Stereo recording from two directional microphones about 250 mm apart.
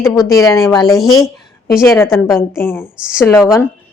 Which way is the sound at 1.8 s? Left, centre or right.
Centre.